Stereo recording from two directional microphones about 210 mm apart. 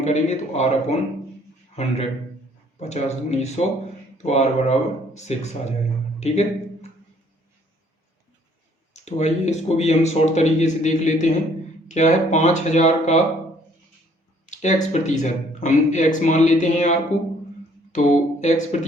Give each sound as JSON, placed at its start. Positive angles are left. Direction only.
{"t": 0.0, "sound": "speech", "side_deg": 35}
{"t": 8.9, "sound": "speech", "side_deg": 30}
{"t": 14.4, "sound": "speech", "side_deg": 35}